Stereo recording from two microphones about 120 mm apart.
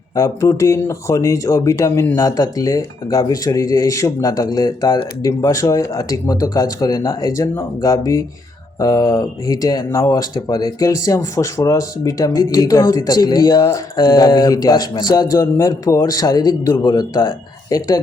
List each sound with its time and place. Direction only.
0.2 s speech: 25° left (ahead or behind)
17.7 s speech: 25° left (ahead or behind)